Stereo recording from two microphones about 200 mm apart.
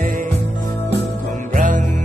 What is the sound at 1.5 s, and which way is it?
Music, 40° right (ahead or behind).